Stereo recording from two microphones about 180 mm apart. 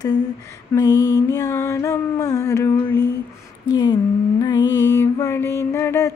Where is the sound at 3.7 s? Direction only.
20° left (ahead or behind).